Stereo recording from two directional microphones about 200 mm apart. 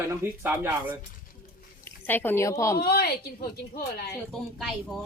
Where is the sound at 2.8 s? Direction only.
50° left (ahead or behind).